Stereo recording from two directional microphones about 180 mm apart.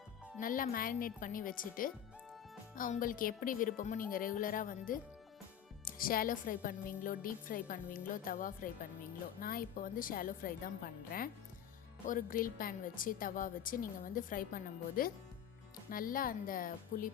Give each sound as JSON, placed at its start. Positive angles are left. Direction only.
{"t": 0.3, "sound": "speech", "side_deg": 50}
{"t": 12.0, "sound": "speech", "side_deg": 50}